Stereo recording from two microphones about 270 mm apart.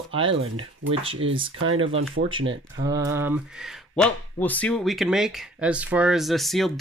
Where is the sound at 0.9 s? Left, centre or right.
Centre.